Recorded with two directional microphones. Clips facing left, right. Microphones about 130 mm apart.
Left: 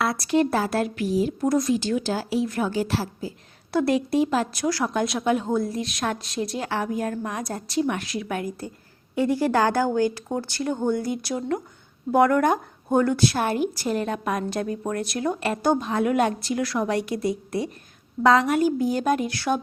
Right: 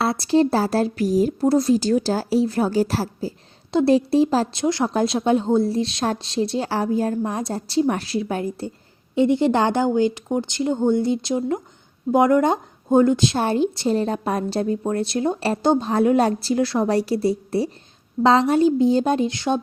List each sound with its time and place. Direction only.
0.0 s a woman's voice: 30° right (ahead or behind)
1.5 s a woman's voice: 30° right (ahead or behind)
3.7 s a woman's voice: 25° right (ahead or behind)